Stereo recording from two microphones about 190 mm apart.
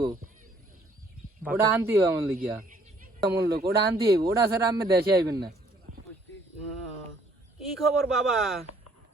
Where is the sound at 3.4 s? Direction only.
55° right (ahead or behind).